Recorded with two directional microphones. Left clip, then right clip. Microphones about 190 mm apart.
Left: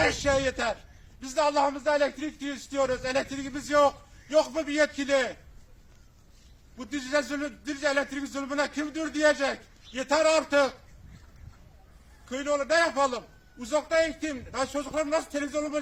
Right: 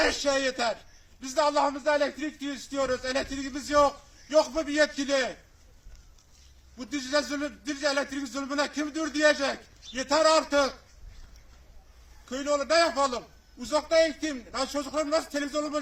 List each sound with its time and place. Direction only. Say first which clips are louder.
0.0 s a man's voice: left 1 dB; 25° left (ahead or behind)
6.7 s a man's voice: even; 25° left (ahead or behind)
12.3 s a man's voice: even; 20° left (ahead or behind)